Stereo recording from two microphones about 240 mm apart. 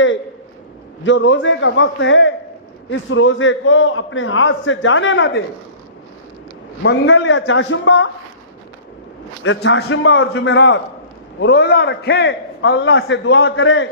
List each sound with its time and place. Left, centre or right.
1.0 s a man's voice: left
6.8 s a man's voice: left
9.4 s a man's voice: left